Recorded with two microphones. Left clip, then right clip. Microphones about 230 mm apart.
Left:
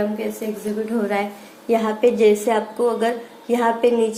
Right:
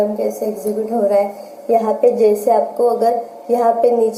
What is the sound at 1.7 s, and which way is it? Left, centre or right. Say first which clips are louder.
Speech: right 4 dB; left.